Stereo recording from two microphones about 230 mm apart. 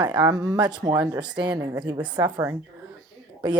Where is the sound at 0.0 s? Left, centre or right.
Centre.